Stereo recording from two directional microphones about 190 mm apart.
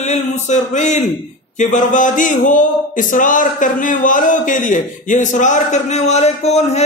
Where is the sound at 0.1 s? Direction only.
40° left (ahead or behind).